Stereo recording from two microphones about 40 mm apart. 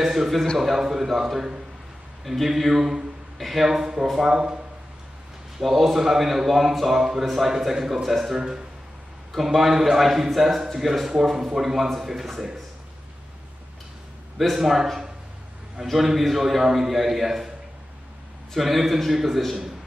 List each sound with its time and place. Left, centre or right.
0.0 s a man's voice: centre
5.6 s a man's voice: centre
8.4 s a man's voice: centre
9.3 s a man's voice: centre
14.4 s a man's voice: centre
15.9 s a man's voice: centre
18.6 s a man's voice: centre